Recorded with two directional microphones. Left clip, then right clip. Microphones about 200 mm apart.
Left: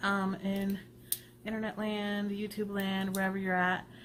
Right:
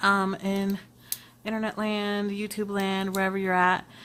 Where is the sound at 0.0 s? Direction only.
40° right (ahead or behind).